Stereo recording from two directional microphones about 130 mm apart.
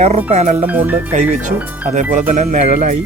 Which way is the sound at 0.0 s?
55° right (ahead or behind).